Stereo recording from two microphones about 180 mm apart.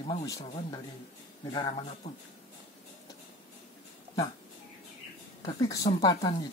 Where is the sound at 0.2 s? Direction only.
20° left (ahead or behind).